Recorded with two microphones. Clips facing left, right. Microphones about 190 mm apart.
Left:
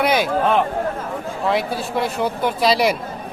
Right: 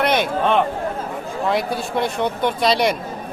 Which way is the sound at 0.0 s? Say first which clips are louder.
Left 1 dB; 5° left (ahead or behind).